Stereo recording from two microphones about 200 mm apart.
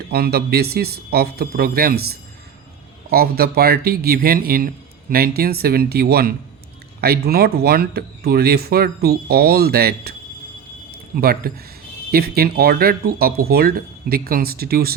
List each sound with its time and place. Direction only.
0.1 s a man's voice: 50° right (ahead or behind)
11.2 s a man's voice: 50° right (ahead or behind)